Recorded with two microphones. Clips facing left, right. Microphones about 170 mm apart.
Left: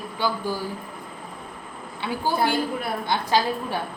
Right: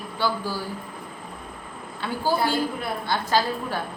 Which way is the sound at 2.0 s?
20° left (ahead or behind).